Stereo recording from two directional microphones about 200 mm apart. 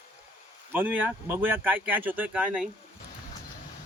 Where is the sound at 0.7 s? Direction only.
10° right (ahead or behind).